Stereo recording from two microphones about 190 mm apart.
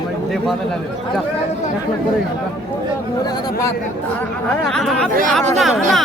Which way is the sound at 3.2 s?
20° left (ahead or behind).